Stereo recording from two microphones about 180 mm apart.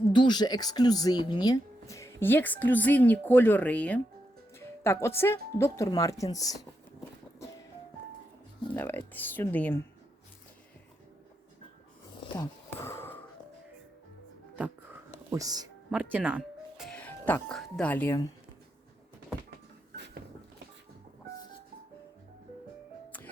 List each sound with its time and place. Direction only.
0.1 s speech: 25° left (ahead or behind)
8.7 s speech: 10° left (ahead or behind)
12.3 s a sound: 15° left (ahead or behind)
15.3 s speech: 20° right (ahead or behind)
15.9 s speech: 10° right (ahead or behind); by 18.3 s 15° left (ahead or behind)